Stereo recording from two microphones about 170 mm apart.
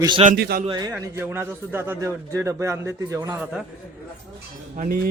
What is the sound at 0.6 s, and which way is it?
Speech, 25° right (ahead or behind).